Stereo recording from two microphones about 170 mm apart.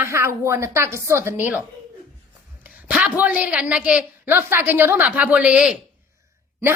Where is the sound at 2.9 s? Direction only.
5° right (ahead or behind).